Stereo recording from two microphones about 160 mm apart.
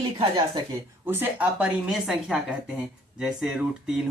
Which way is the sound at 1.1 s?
10° right (ahead or behind).